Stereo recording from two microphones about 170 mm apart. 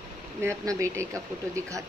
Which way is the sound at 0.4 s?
15° right (ahead or behind).